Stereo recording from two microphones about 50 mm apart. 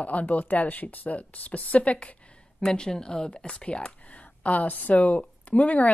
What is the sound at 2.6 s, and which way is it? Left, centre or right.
Speech, centre.